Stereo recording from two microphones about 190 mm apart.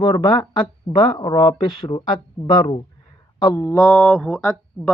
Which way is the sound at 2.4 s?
10° left (ahead or behind).